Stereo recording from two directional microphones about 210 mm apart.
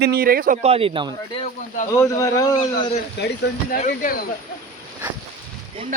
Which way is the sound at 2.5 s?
35° left (ahead or behind).